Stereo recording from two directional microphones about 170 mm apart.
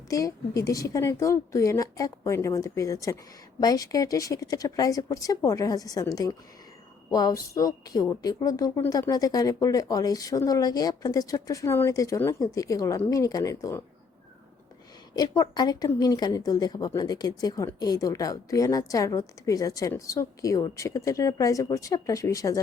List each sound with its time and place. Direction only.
0.1 s a woman's voice: 20° left (ahead or behind)
15.1 s a woman's voice: 25° left (ahead or behind)